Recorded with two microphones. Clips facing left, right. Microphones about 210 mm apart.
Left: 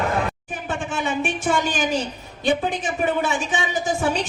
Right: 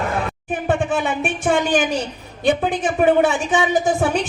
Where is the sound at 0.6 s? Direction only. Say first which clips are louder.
Right 6 dB; 55° right (ahead or behind).